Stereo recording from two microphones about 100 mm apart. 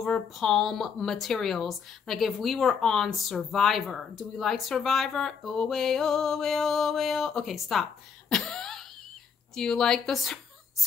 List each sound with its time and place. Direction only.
0.0 s speech: centre (ahead or behind)
8.3 s cough: 5° left (ahead or behind)
9.6 s speech: 5° left (ahead or behind)